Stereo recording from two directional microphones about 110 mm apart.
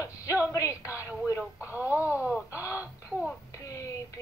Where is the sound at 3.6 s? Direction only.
30° left (ahead or behind).